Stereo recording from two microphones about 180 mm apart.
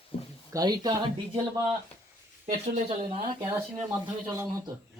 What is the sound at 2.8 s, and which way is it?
Speech, 30° right (ahead or behind).